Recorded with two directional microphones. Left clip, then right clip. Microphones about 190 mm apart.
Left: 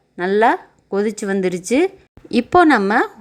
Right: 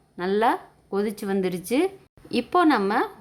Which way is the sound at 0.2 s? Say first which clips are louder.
Left 7 dB; 25° left (ahead or behind).